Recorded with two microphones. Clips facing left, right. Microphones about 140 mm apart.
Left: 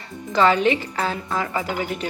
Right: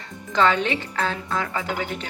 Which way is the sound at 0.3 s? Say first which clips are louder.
Left 3 dB; 5° left (ahead or behind).